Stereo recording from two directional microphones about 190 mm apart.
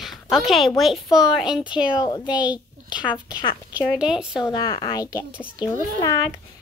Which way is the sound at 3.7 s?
5° right (ahead or behind).